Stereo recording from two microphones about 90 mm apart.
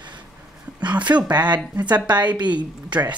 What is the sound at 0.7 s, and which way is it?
Speech, 15° right (ahead or behind).